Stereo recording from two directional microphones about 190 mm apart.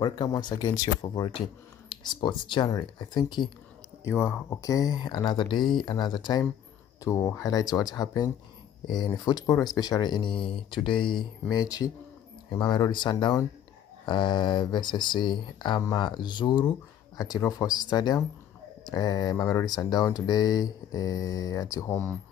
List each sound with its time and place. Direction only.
0.0 s speech: 20° left (ahead or behind)
4.0 s speech: 10° left (ahead or behind)